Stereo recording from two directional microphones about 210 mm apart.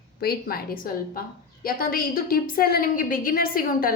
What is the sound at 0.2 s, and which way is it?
Speech, 45° left (ahead or behind).